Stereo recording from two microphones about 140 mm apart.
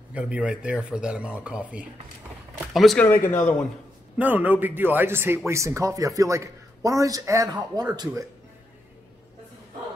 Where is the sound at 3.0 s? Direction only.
15° left (ahead or behind).